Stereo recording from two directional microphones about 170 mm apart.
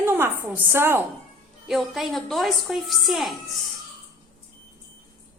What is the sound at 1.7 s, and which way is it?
A woman's voice, centre (ahead or behind).